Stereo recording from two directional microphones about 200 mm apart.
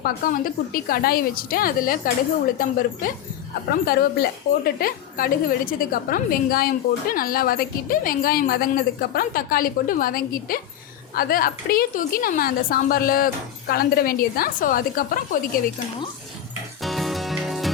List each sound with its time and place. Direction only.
0.0 s a woman's voice: 45° left (ahead or behind)
3.7 s a woman's voice: 50° left (ahead or behind)
16.8 s music: centre (ahead or behind)